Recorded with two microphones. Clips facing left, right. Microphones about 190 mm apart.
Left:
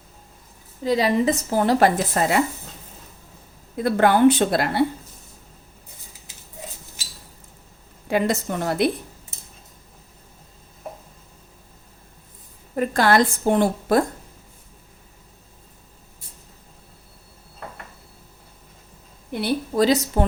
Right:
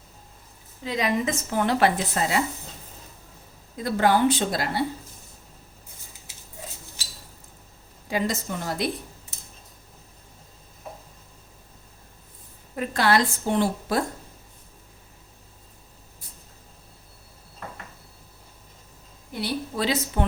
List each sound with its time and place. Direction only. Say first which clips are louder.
0.9 s a woman's voice: left 6 dB; 35° left (ahead or behind)
3.8 s speech: left 4 dB; 60° left (ahead or behind)
8.0 s speech: left 5 dB; 60° left (ahead or behind)
12.7 s a woman's voice: left 4 dB; 45° left (ahead or behind)
19.3 s a sound: left 6 dB; 55° left (ahead or behind)
19.7 s a woman's voice: left 8 dB; 40° left (ahead or behind)